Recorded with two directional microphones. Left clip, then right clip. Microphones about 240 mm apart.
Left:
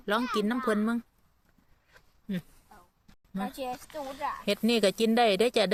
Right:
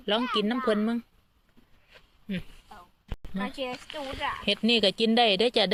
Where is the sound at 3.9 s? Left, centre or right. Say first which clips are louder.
Right 2 dB; right.